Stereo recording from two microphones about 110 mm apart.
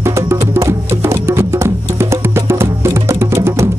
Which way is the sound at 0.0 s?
25° right (ahead or behind).